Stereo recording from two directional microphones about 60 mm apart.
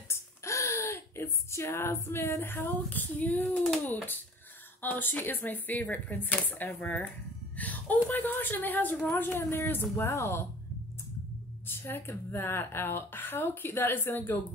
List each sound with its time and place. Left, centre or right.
0.1 s speech: left
7.5 s a sound: left
8.1 s speech: left
11.6 s speech: left